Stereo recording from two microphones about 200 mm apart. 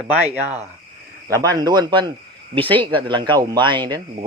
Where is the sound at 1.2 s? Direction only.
20° right (ahead or behind).